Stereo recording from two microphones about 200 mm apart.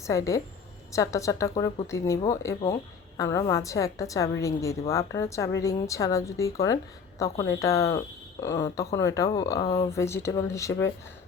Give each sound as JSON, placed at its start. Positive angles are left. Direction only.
{"t": 0.0, "sound": "speech", "side_deg": 15}